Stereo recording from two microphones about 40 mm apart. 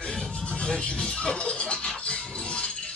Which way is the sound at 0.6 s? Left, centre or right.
Left.